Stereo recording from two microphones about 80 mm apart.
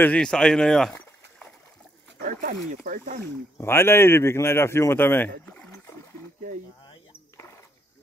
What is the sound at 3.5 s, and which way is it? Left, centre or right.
Speech, left.